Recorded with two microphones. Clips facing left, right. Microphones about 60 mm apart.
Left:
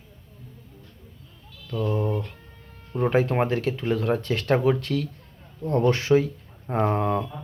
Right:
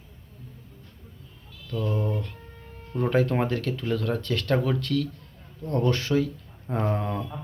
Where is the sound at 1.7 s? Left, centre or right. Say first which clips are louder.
Left 3 dB; centre.